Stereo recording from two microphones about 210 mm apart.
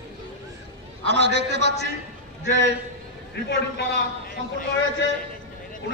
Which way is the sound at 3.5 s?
55° left (ahead or behind).